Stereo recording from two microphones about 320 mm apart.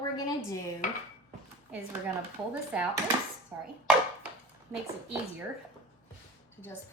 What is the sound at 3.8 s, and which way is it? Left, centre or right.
Chopping, centre.